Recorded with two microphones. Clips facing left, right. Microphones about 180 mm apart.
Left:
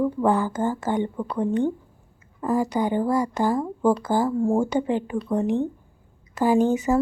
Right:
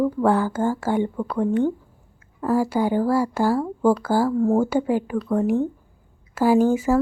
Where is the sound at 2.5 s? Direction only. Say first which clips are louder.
Right 2 dB; 5° right (ahead or behind).